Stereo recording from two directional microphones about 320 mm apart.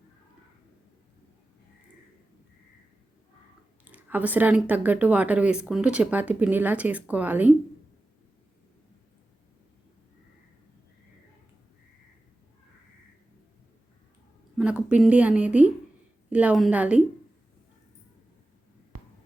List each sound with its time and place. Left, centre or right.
3.8 s speech: centre
14.6 s speech: centre
18.9 s a sound: right